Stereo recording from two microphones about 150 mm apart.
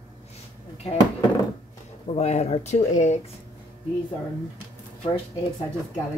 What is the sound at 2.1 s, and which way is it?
Speech, 45° left (ahead or behind).